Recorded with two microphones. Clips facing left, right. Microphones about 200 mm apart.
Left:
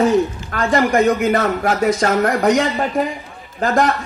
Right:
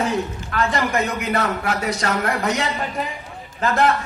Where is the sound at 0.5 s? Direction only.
45° left (ahead or behind).